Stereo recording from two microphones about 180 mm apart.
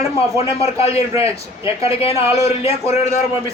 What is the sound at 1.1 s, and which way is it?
Speech, 15° right (ahead or behind).